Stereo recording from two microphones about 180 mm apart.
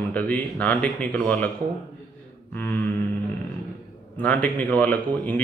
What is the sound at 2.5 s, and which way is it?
Speech, 10° left (ahead or behind).